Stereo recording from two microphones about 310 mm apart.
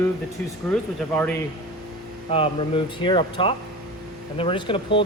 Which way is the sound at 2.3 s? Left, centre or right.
Centre.